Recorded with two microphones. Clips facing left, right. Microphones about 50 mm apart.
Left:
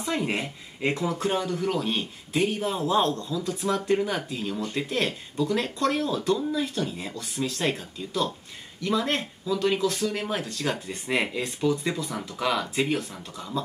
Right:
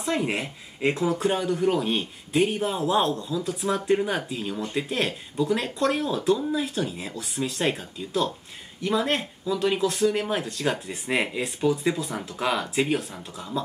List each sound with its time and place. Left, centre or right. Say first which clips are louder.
0.1 s speech: right 2 dB; centre
0.9 s speech: right 3 dB; right
1.2 s speech: right 3 dB; centre
4.6 s speech: right 2 dB; right
4.8 s speech: even; centre
5.8 s speech: right 1 dB; right
9.0 s speech: right 2 dB; centre
9.8 s speech: right 3 dB; right
10.1 s speech: right 3 dB; centre